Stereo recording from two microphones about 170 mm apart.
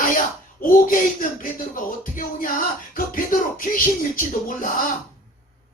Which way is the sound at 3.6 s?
50° left (ahead or behind).